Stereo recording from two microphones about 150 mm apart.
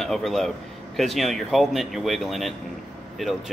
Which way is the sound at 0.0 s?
Centre (ahead or behind).